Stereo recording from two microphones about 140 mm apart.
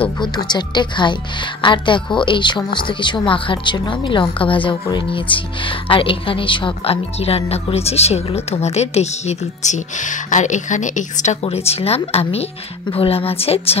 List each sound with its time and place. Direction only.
0.5 s speech: 30° left (ahead or behind)